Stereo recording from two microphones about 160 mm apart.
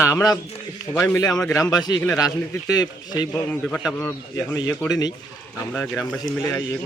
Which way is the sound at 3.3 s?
5° left (ahead or behind).